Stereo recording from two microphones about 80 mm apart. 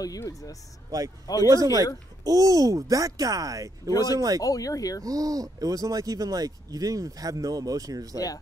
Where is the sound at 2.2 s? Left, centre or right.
Right.